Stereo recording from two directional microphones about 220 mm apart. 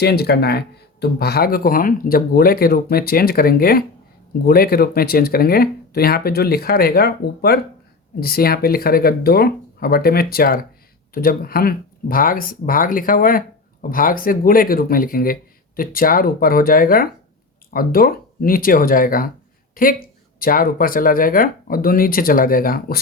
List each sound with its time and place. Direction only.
0.0 s speech: 45° left (ahead or behind)